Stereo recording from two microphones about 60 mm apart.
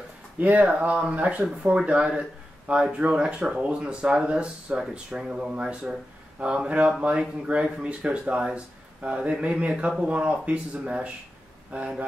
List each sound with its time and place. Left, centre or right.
0.4 s speech: right